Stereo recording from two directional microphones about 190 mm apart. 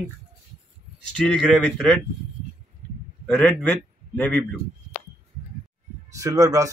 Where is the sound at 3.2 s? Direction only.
5° left (ahead or behind).